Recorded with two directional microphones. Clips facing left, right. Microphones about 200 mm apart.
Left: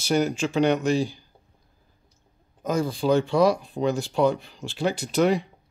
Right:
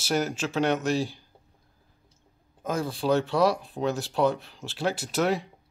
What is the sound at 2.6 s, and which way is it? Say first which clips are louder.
Speech: left 3 dB; centre (ahead or behind).